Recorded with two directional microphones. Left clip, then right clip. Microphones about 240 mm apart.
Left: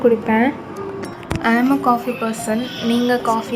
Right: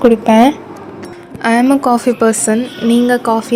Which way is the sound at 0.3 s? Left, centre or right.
Right.